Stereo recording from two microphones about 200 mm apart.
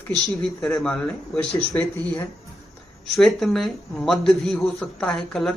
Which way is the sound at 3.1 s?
Centre (ahead or behind).